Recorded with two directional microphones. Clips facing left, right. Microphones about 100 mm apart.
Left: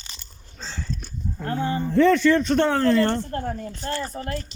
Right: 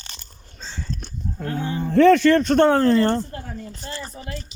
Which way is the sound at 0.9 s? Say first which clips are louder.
Right 1 dB; 55° right (ahead or behind).